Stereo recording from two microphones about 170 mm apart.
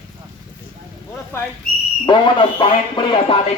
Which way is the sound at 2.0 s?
30° left (ahead or behind).